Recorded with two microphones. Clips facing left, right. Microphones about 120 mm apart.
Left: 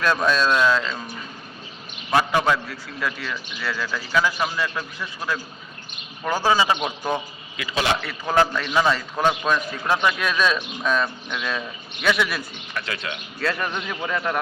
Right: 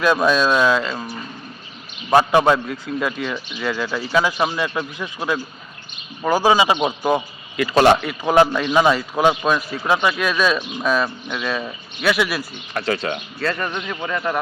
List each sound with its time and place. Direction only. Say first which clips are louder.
0.0 s a man's voice: right 4 dB; 10° right (ahead or behind)
2.1 s a man's voice: right 5 dB; 20° right (ahead or behind)
7.5 s a man's voice: right 10 dB; 55° right (ahead or behind)
8.0 s a man's voice: right 5 dB; 15° right (ahead or behind)
12.7 s speech: right 8 dB; 35° right (ahead or behind)
13.4 s a man's voice: right 1 dB; centre (ahead or behind)